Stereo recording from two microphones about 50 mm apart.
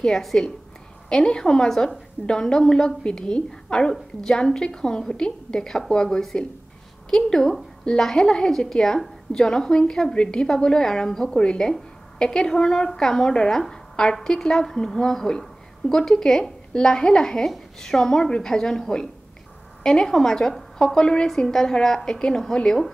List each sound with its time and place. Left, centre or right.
0.0 s a woman's voice: centre